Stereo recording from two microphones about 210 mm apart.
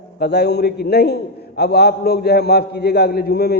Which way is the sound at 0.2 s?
50° left (ahead or behind).